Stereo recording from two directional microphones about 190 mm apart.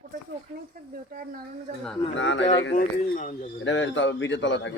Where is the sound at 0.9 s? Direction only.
50° right (ahead or behind).